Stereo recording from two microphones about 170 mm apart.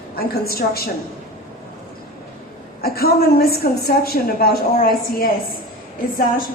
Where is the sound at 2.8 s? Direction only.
65° left (ahead or behind).